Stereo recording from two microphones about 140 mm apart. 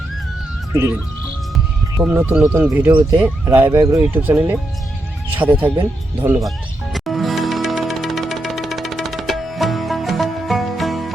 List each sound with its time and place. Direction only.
0.7 s speech: 20° right (ahead or behind)
2.0 s speech: 20° right (ahead or behind)
6.9 s music: centre (ahead or behind)